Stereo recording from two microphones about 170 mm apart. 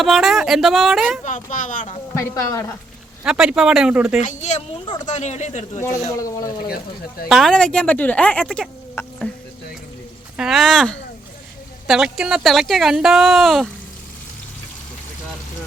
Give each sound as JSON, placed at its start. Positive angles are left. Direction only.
{"t": 0.0, "sound": "speech", "side_deg": 0}
{"t": 1.2, "sound": "speech", "side_deg": 45}
{"t": 2.1, "sound": "speech", "side_deg": 20}
{"t": 3.2, "sound": "speech", "side_deg": -5}
{"t": 4.2, "sound": "speech", "side_deg": 45}
{"t": 6.1, "sound": "speech", "side_deg": 20}
{"t": 7.3, "sound": "speech", "side_deg": 0}
{"t": 9.0, "sound": "a sound", "side_deg": 15}
{"t": 10.3, "sound": "speech", "side_deg": 0}